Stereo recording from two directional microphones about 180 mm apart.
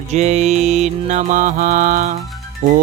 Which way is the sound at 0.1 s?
40° right (ahead or behind).